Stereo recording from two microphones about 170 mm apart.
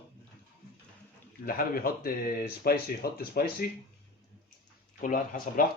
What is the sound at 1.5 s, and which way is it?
Speech, 60° left (ahead or behind).